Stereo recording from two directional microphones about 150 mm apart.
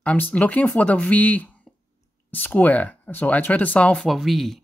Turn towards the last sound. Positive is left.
turn(degrees=0)  # may be behind; listen again after turning